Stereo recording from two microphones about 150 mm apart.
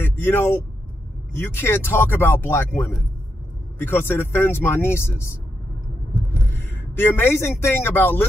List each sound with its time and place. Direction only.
0.0 s vehicle: 15° left (ahead or behind)
1.3 s speech: 15° left (ahead or behind)
6.9 s speech: 15° left (ahead or behind)